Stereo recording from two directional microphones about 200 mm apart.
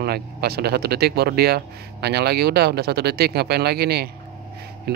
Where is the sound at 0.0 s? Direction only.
50° right (ahead or behind).